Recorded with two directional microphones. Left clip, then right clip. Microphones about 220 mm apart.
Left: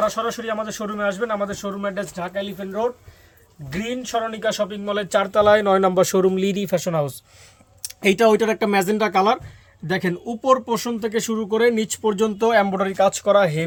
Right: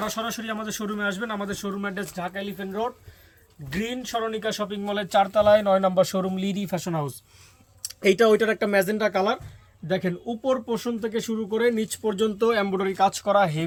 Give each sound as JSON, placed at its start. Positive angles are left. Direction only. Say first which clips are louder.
{"t": 0.0, "sound": "a man's voice", "louder": "left 7 dB", "side_deg": 10}